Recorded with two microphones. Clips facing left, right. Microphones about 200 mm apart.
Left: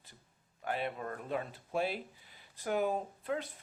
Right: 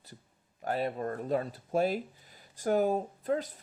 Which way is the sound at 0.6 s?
40° right (ahead or behind).